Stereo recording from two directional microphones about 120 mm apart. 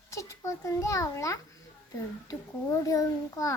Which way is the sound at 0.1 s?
25° left (ahead or behind).